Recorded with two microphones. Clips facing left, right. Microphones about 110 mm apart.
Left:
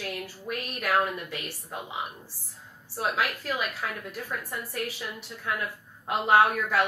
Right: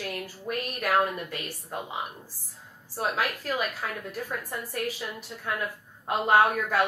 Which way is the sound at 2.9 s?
40° right (ahead or behind).